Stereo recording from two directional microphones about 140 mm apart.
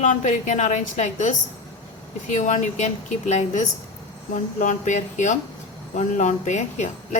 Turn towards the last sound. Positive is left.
turn(degrees=55)  # may be behind; listen again after turning